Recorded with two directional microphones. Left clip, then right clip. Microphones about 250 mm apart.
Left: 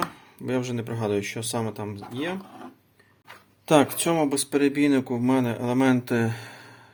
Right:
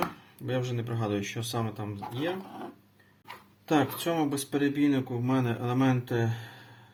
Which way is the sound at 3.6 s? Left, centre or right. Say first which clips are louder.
Left 7 dB; left.